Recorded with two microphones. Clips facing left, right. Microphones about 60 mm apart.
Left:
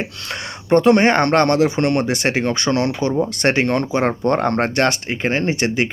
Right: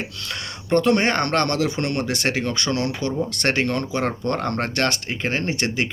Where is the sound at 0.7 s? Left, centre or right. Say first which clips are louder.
Left 6 dB; left.